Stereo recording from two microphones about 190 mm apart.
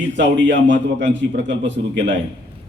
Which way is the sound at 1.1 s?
75° right (ahead or behind).